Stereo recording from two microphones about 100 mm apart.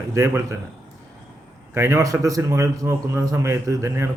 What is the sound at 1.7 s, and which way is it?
A man's voice, 30° right (ahead or behind).